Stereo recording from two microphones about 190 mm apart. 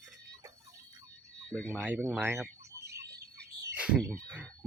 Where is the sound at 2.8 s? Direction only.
60° right (ahead or behind).